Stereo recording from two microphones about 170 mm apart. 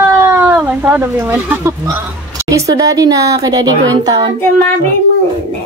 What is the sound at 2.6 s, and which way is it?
A woman's voice, 20° right (ahead or behind).